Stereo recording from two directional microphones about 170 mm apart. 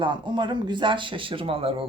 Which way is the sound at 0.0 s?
25° right (ahead or behind).